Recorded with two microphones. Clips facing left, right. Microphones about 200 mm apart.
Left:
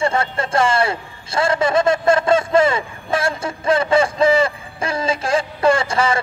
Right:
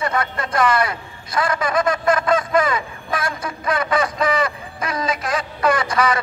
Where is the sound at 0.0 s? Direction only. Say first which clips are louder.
Left 3 dB; 25° left (ahead or behind).